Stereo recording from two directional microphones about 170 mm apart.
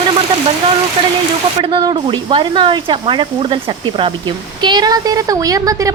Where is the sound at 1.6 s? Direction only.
30° right (ahead or behind).